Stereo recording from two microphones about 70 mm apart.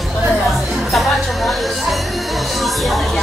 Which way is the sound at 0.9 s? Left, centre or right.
Centre.